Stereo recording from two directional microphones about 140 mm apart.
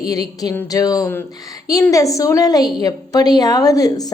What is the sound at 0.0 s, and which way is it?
A woman's voice, 25° left (ahead or behind).